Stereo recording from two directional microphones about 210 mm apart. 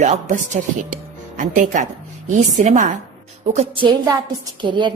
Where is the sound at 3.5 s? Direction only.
25° right (ahead or behind).